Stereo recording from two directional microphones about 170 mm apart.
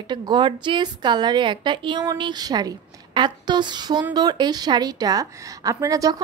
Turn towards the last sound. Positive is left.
turn(degrees=-20)  # may be behind; listen again after turning